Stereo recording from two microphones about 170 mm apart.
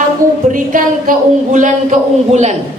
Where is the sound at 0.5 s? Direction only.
50° right (ahead or behind).